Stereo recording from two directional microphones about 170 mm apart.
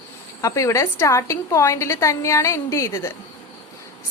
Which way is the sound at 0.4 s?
20° left (ahead or behind).